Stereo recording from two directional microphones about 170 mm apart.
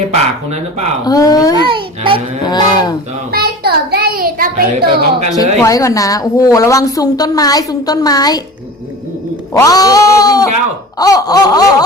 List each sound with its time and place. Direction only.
0.1 s speech: 40° right (ahead or behind)
1.0 s a woman's voice: 20° left (ahead or behind)
1.6 s babbling: 30° right (ahead or behind)
2.4 s a woman's voice: 25° left (ahead or behind)
3.3 s a child's voice: 65° right (ahead or behind)
5.6 s a woman's voice: 20° left (ahead or behind)
9.5 s a woman's voice: 15° left (ahead or behind)